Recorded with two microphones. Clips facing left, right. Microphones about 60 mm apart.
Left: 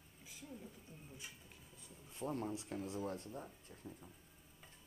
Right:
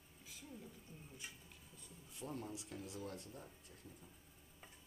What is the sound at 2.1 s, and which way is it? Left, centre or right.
Speech, left.